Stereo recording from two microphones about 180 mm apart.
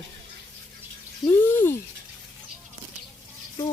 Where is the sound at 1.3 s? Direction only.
10° left (ahead or behind).